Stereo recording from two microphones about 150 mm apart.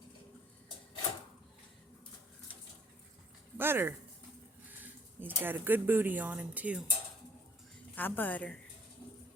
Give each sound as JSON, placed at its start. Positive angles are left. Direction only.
{"t": 3.6, "sound": "speech", "side_deg": -15}
{"t": 7.9, "sound": "a woman's voice", "side_deg": 10}